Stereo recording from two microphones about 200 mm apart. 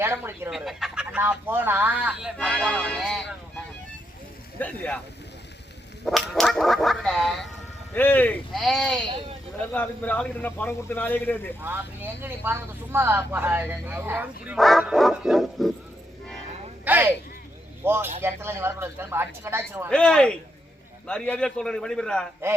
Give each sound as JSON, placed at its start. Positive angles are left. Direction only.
{"t": 0.0, "sound": "speech", "side_deg": -10}
{"t": 4.6, "sound": "a man's voice", "side_deg": 10}
{"t": 6.1, "sound": "a man's voice", "side_deg": 0}
{"t": 11.6, "sound": "speech", "side_deg": -10}
{"t": 16.8, "sound": "a sound", "side_deg": -10}
{"t": 17.8, "sound": "speech", "side_deg": -10}
{"t": 19.9, "sound": "speech", "side_deg": 5}